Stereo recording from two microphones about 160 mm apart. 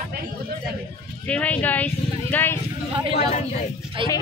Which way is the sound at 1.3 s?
10° left (ahead or behind).